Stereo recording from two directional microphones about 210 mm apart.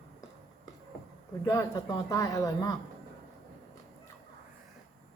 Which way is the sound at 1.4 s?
15° left (ahead or behind).